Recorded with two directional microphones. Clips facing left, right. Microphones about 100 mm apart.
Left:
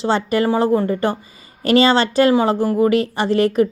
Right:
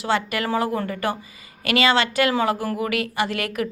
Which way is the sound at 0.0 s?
30° left (ahead or behind).